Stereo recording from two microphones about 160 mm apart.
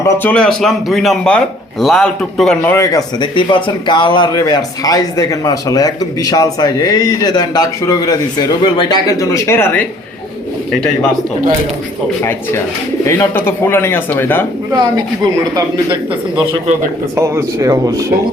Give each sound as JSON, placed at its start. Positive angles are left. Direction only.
{"t": 0.0, "sound": "a man's voice", "side_deg": 15}
{"t": 2.6, "sound": "speech", "side_deg": 20}
{"t": 12.2, "sound": "a man's voice", "side_deg": 15}
{"t": 14.7, "sound": "speech", "side_deg": -25}
{"t": 17.2, "sound": "speech", "side_deg": -15}